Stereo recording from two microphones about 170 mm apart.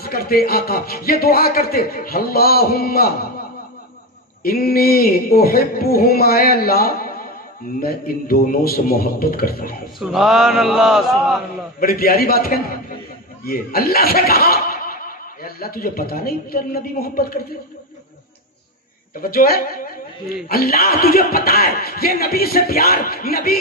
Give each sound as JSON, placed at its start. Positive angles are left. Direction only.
{"t": 0.0, "sound": "speech", "side_deg": 60}
{"t": 4.4, "sound": "speech", "side_deg": 60}
{"t": 10.0, "sound": "a man's voice", "side_deg": 0}
{"t": 11.8, "sound": "speech", "side_deg": 60}
{"t": 19.1, "sound": "speech", "side_deg": 60}